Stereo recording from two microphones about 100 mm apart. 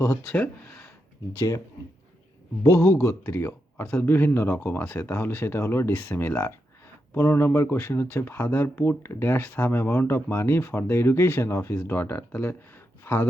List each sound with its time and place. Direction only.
0.3 s speech: 15° left (ahead or behind)
1.3 s speech: 30° left (ahead or behind)
2.6 s speech: 30° left (ahead or behind)